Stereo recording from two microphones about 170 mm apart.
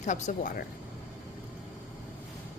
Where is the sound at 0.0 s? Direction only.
45° left (ahead or behind).